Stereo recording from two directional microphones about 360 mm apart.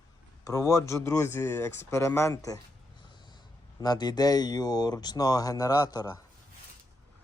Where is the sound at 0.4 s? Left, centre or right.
Centre.